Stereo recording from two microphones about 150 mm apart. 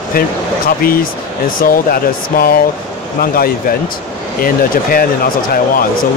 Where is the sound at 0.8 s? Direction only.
70° left (ahead or behind).